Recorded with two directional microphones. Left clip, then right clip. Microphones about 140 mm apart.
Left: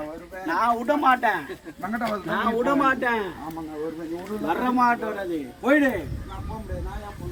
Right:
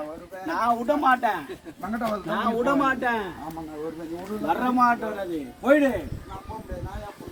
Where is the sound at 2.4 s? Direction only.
15° right (ahead or behind).